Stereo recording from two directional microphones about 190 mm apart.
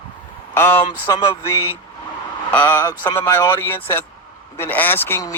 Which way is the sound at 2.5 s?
10° left (ahead or behind).